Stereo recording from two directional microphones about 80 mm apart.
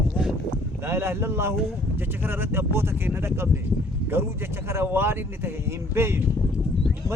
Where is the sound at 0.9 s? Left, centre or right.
Right.